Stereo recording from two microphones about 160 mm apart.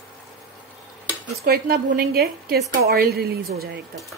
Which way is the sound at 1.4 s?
70° right (ahead or behind).